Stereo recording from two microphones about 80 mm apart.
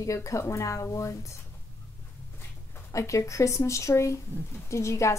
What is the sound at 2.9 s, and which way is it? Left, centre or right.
Speech, left.